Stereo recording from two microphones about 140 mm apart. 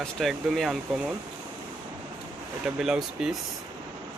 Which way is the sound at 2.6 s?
5° right (ahead or behind).